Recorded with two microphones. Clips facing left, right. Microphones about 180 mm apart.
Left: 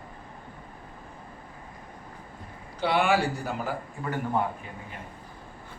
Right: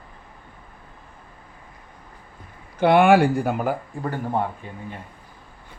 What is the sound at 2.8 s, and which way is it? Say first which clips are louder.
Speech: right 9 dB; 55° right (ahead or behind).